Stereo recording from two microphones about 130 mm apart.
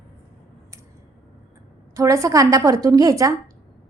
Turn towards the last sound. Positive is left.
turn(degrees=-25)  # may be behind; listen again after turning